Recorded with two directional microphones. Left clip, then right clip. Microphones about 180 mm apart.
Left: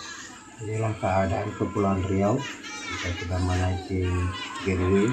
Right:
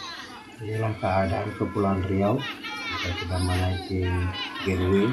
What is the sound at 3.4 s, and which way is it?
Speech, centre (ahead or behind).